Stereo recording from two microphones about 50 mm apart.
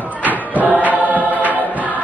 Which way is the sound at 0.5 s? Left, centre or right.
Right.